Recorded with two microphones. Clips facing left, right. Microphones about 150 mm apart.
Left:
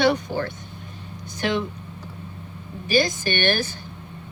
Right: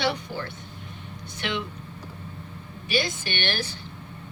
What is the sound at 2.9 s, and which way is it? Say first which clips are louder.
Speech: left 6 dB; 45° left (ahead or behind).